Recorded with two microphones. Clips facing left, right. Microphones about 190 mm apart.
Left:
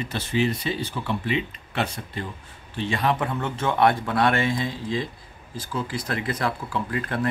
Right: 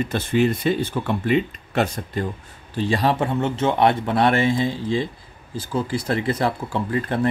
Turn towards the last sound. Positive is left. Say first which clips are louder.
# right 4 dB
turn(degrees=-25)  # may be behind; listen again after turning